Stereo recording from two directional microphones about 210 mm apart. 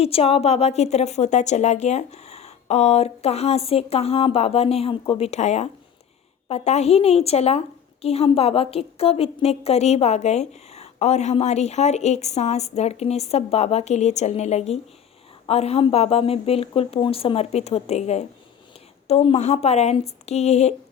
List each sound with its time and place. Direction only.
0.0 s a woman's voice: 30° left (ahead or behind)